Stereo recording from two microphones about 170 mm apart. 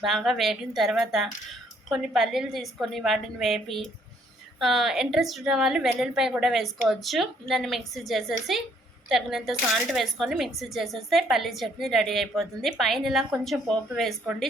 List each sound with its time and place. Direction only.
0.0 s speech: centre (ahead or behind)